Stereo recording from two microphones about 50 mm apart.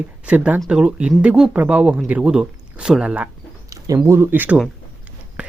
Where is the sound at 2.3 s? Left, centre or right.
Centre.